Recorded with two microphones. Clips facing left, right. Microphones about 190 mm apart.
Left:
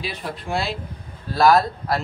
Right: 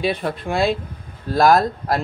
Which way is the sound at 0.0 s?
55° right (ahead or behind).